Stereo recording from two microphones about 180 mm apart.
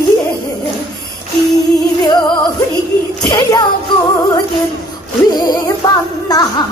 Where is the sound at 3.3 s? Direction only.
20° left (ahead or behind).